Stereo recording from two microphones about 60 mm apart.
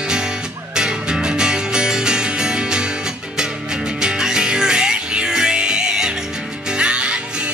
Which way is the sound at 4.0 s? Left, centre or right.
Centre.